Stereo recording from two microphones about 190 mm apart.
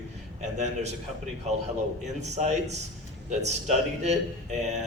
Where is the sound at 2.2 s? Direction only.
35° right (ahead or behind).